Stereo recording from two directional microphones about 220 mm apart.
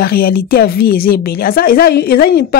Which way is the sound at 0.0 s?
45° left (ahead or behind).